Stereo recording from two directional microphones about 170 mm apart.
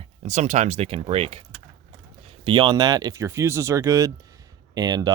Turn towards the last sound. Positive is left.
turn(degrees=-25)  # may be behind; listen again after turning